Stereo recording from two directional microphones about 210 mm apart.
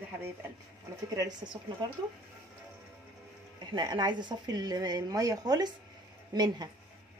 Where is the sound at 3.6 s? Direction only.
20° right (ahead or behind).